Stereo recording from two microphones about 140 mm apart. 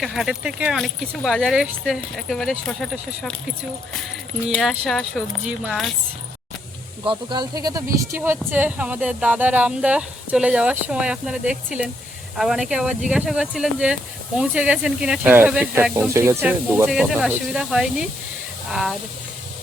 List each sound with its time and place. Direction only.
0.0 s speech: centre (ahead or behind)
4.8 s speech: centre (ahead or behind)
7.0 s speech: 35° right (ahead or behind); by 18.9 s centre (ahead or behind)